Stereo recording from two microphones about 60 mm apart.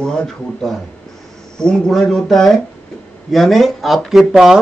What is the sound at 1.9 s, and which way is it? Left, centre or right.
A woman's voice, centre.